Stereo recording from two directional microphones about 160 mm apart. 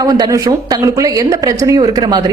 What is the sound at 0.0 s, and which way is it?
Speech, 25° right (ahead or behind).